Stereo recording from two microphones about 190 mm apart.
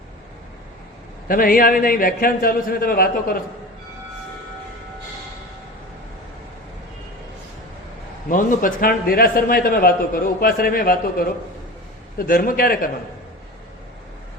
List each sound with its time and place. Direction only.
1.3 s a man's voice: 50° left (ahead or behind)
8.3 s a man's voice: 45° left (ahead or behind)